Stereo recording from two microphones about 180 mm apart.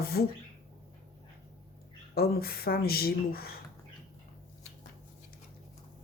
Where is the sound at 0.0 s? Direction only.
60° left (ahead or behind).